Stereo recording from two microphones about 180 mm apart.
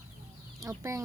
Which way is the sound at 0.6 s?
15° right (ahead or behind).